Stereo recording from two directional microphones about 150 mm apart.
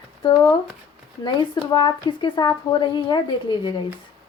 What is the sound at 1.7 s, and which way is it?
A woman's voice, 30° left (ahead or behind).